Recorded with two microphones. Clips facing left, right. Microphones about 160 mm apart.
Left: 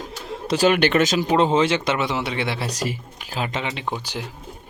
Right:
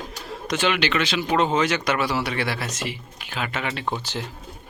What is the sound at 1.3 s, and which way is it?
Speech, 30° left (ahead or behind).